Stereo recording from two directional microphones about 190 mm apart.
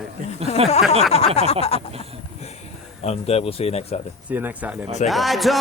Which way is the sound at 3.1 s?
30° left (ahead or behind).